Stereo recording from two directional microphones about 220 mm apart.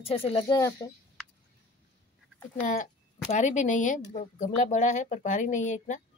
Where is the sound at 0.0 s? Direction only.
25° left (ahead or behind).